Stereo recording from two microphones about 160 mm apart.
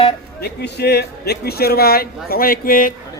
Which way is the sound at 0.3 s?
85° left.